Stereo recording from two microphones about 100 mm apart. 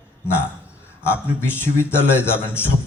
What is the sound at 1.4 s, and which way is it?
A man's voice, 20° left (ahead or behind).